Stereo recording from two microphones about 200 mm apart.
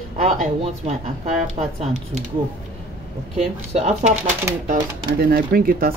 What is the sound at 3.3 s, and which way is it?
Speech, 30° right (ahead or behind).